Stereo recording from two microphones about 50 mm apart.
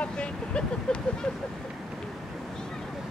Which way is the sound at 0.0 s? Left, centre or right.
Left.